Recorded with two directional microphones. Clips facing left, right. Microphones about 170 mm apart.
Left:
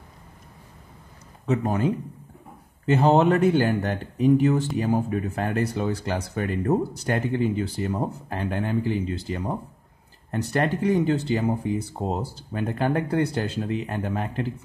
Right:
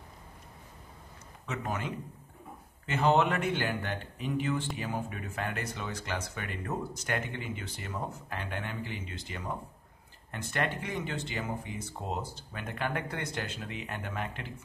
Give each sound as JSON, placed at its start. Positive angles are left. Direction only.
{"t": 1.4, "sound": "speech", "side_deg": 35}